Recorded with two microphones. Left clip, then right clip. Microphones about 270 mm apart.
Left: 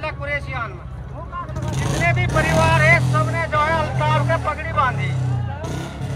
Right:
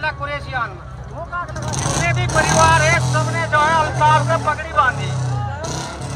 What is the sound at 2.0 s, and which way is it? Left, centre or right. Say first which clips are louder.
Vehicle: left 4 dB; centre.